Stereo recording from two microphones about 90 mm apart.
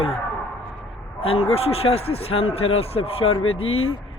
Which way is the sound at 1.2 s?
90° left.